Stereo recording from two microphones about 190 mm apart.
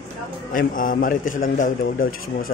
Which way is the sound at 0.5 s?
45° left (ahead or behind).